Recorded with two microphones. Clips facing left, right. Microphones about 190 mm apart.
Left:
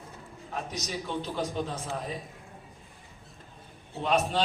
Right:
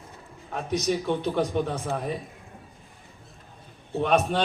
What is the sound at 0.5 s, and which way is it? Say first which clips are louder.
A man's voice: right 9 dB; 60° right (ahead or behind).